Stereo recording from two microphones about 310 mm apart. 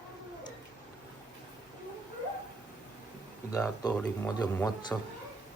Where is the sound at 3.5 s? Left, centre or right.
Centre.